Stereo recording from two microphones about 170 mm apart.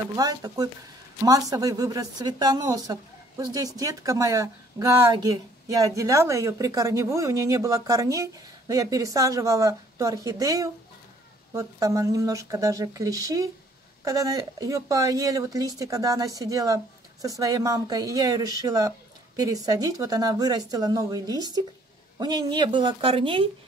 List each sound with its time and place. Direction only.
0.1 s speech: 25° right (ahead or behind)